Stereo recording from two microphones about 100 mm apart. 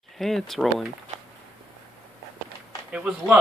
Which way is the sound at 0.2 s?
Centre (ahead or behind).